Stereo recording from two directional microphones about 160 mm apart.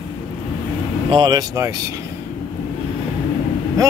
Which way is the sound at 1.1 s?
25° right (ahead or behind).